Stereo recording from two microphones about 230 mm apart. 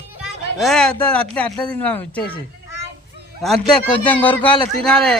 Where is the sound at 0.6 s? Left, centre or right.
Centre.